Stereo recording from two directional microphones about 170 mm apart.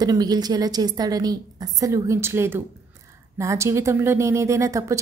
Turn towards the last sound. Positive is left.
turn(degrees=-20)  # may be behind; listen again after turning